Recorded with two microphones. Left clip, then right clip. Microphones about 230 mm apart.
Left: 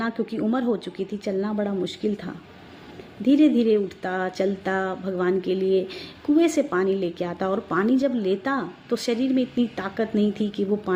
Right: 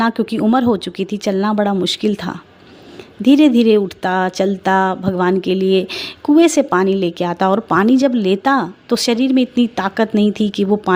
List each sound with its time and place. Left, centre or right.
0.0 s speech: right